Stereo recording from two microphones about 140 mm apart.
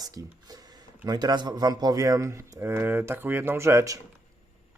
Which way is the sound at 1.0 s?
30° right (ahead or behind).